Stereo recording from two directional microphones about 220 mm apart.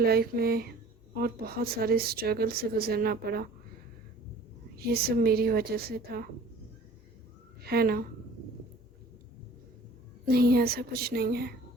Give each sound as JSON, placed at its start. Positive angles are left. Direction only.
{"t": 0.0, "sound": "speech", "side_deg": -45}
{"t": 4.8, "sound": "speech", "side_deg": -45}
{"t": 7.6, "sound": "a woman's voice", "side_deg": -45}
{"t": 10.2, "sound": "speech", "side_deg": -45}